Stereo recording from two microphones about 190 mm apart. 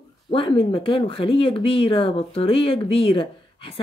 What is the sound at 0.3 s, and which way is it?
Speech, 30° left (ahead or behind).